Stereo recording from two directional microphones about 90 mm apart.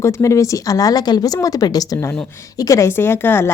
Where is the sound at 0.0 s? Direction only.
35° left (ahead or behind).